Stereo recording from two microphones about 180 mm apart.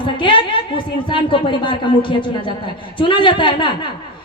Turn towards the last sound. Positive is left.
turn(degrees=25)  # may be behind; listen again after turning